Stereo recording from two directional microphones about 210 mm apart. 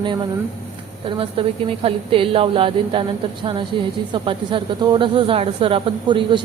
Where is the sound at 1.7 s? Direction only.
25° right (ahead or behind).